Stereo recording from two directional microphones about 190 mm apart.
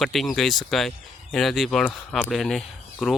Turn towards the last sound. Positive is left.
turn(degrees=0)  # may be behind; listen again after turning